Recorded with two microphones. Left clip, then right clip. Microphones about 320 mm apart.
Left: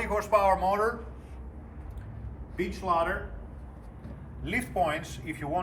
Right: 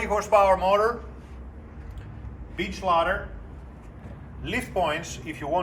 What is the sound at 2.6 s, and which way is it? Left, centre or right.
Speech, right.